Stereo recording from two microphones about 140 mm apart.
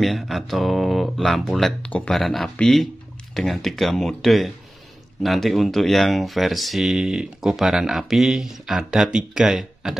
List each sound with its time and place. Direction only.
0.0 s speech: centre (ahead or behind)